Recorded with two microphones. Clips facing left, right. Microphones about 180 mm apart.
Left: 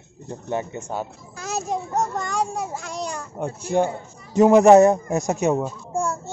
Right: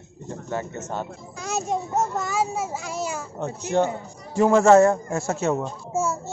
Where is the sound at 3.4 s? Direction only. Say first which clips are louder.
Left 1 dB; 10° left (ahead or behind).